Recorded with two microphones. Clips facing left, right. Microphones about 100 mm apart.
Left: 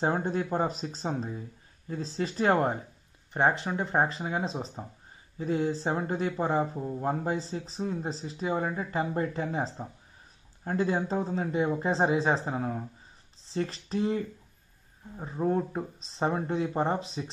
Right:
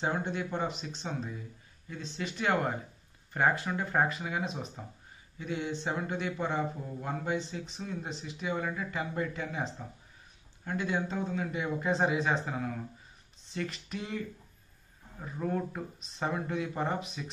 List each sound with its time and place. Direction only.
0.0 s speech: 40° left (ahead or behind)